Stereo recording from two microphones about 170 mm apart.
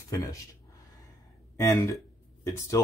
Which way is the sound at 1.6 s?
20° left (ahead or behind).